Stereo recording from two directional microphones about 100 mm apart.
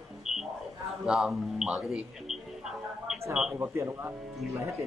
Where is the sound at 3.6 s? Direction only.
25° right (ahead or behind).